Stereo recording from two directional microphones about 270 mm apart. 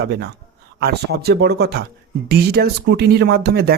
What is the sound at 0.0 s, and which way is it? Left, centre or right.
Speech, right.